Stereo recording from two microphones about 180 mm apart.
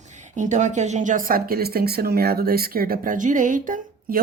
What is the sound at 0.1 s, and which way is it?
A woman's voice, 45° right (ahead or behind).